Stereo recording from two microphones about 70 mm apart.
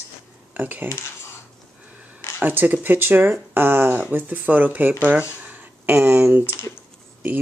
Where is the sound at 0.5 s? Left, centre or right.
Right.